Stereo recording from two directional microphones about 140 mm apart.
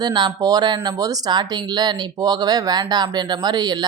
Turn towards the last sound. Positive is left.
turn(degrees=-30)  # may be behind; listen again after turning